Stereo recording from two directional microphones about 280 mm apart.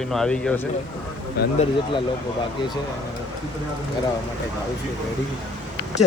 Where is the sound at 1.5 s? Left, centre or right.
Centre.